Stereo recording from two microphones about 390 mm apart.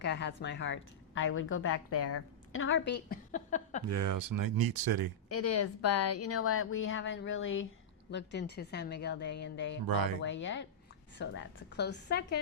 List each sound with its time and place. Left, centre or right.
0.0 s a woman's voice: left
3.8 s speech: right
5.3 s a woman's voice: left
9.8 s speech: right
10.2 s speech: left